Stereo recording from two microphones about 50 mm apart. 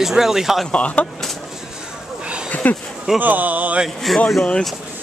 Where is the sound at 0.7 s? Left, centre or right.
Left.